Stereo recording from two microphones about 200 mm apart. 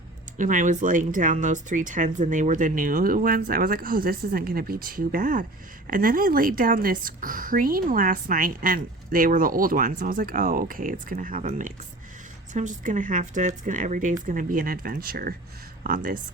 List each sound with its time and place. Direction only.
0.3 s a woman's voice: 40° right (ahead or behind)